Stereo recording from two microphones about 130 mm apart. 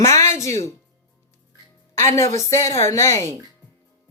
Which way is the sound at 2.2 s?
20° left (ahead or behind).